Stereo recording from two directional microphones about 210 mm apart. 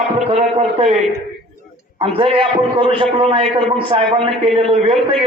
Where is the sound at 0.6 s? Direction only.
25° right (ahead or behind).